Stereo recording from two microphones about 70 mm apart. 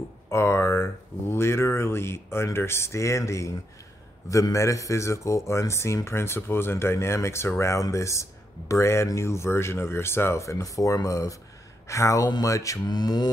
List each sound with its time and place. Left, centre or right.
0.3 s a man's voice: left
12.8 s mantra: left